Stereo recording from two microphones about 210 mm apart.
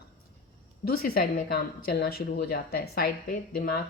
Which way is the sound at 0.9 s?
45° left (ahead or behind).